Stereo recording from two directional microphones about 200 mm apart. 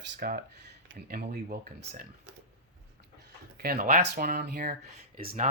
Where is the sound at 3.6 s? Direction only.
50° right (ahead or behind).